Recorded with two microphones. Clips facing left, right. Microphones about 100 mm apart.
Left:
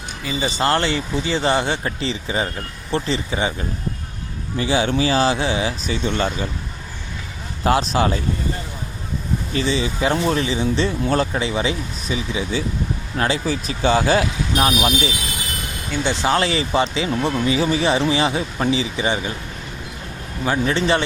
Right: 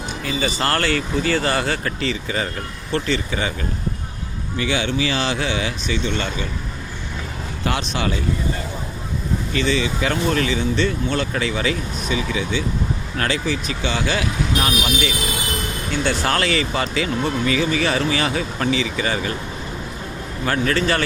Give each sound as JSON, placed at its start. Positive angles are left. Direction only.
{"t": 0.3, "sound": "speech", "side_deg": 20}
{"t": 4.5, "sound": "speech", "side_deg": 35}
{"t": 7.6, "sound": "speech", "side_deg": 35}
{"t": 9.5, "sound": "speech", "side_deg": 30}
{"t": 16.0, "sound": "speech", "side_deg": 15}
{"t": 16.4, "sound": "speech", "side_deg": 30}
{"t": 20.4, "sound": "speech", "side_deg": 15}
{"t": 20.7, "sound": "speech", "side_deg": 25}